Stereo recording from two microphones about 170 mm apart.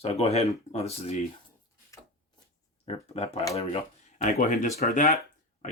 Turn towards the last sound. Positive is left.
turn(degrees=45)  # may be behind; listen again after turning